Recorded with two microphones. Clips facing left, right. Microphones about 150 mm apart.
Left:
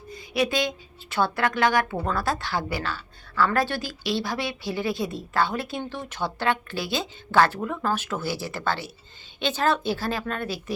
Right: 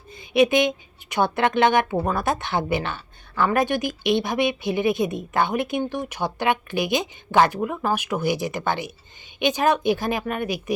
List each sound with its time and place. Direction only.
0.1 s a woman's voice: 20° right (ahead or behind)